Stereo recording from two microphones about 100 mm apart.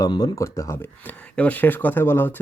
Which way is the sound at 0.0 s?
45° left (ahead or behind).